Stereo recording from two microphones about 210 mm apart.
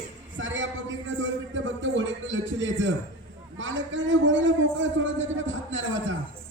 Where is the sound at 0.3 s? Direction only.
65° right (ahead or behind).